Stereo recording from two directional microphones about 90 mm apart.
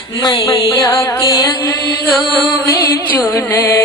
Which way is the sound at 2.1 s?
25° left (ahead or behind).